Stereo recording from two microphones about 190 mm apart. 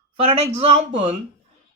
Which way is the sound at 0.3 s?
35° right (ahead or behind).